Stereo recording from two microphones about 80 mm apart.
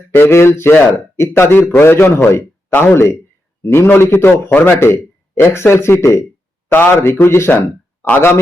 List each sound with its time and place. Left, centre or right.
0.1 s speech: left